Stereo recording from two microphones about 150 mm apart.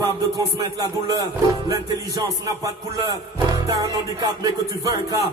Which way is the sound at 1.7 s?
25° right (ahead or behind).